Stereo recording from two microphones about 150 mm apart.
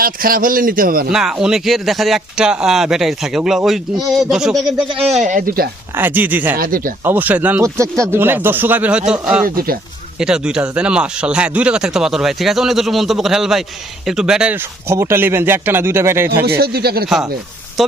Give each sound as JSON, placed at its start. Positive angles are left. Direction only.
{"t": 0.0, "sound": "a man's voice", "side_deg": -70}
{"t": 1.1, "sound": "speech", "side_deg": -5}
{"t": 5.2, "sound": "speech", "side_deg": -65}
{"t": 6.0, "sound": "speech", "side_deg": -10}
{"t": 6.6, "sound": "a man's voice", "side_deg": -70}
{"t": 7.0, "sound": "speech", "side_deg": -10}
{"t": 10.2, "sound": "speech", "side_deg": -5}
{"t": 16.6, "sound": "speech", "side_deg": -90}
{"t": 17.8, "sound": "speech", "side_deg": 0}